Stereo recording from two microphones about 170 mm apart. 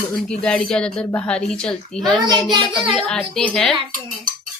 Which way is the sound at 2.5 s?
30° right (ahead or behind).